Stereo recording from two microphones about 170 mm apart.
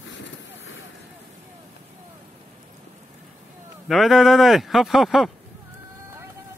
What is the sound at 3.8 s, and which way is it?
Speech, centre (ahead or behind).